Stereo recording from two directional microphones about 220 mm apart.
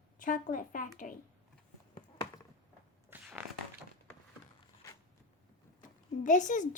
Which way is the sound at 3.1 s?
10° right (ahead or behind).